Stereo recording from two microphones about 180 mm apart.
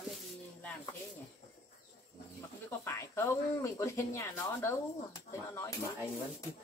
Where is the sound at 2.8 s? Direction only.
15° left (ahead or behind).